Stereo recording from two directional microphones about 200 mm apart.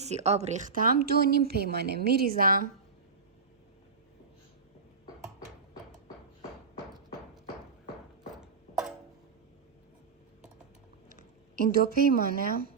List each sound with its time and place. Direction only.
0.0 s speech: 35° right (ahead or behind)
8.4 s a sound: 5° right (ahead or behind)
11.1 s speech: 40° right (ahead or behind)